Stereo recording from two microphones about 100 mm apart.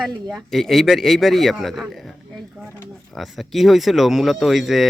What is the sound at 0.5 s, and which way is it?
Speech, centre (ahead or behind).